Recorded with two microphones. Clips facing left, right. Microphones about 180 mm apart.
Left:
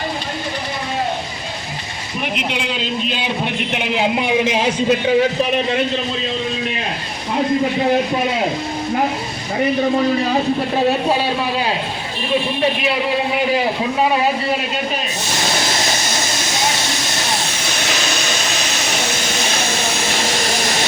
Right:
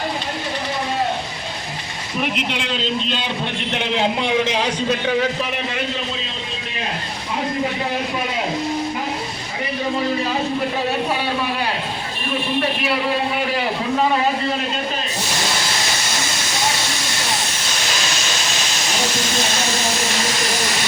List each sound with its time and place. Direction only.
2.2 s a man's voice: centre (ahead or behind)
14.0 s speech: 15° left (ahead or behind)